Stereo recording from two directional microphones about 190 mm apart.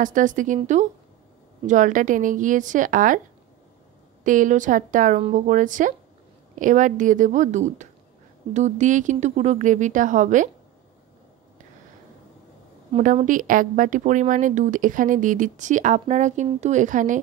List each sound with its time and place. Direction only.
0.0 s a woman's voice: 45° right (ahead or behind)
4.2 s a woman's voice: 45° right (ahead or behind)
12.9 s a woman's voice: 45° right (ahead or behind)